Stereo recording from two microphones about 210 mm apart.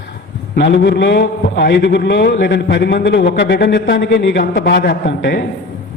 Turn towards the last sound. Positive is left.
turn(degrees=55)  # may be behind; listen again after turning